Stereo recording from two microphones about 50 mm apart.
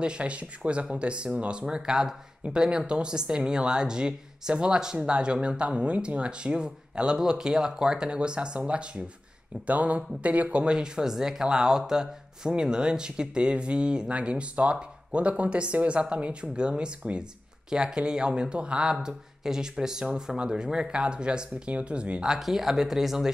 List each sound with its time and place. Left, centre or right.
0.0 s speech: right
22.3 s speech: centre